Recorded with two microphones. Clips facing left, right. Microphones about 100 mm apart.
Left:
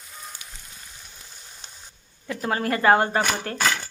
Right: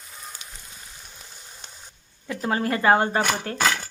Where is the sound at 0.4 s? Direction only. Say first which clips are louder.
Right 1 dB; 25° right (ahead or behind).